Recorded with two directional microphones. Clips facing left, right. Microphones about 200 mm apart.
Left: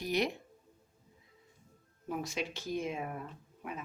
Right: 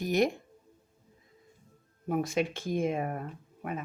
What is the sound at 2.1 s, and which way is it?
A woman's voice, 55° right (ahead or behind).